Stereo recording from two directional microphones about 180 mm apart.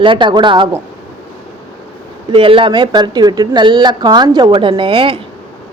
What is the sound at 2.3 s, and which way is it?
Speech, 30° right (ahead or behind).